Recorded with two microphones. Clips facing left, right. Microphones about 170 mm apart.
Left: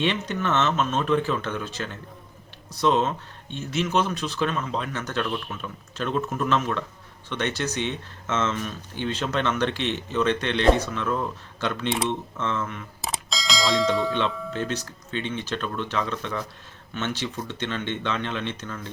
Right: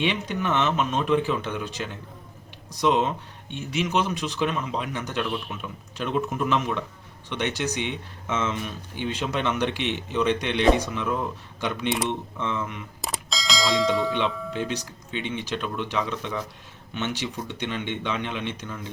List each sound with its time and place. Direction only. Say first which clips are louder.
0.0 s speech: left 1 dB; 10° right (ahead or behind)
13.0 s bell: even; centre (ahead or behind)
14.5 s speech: even; 15° right (ahead or behind)